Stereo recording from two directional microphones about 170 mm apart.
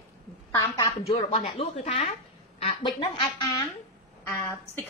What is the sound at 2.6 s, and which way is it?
Speech, 30° left (ahead or behind).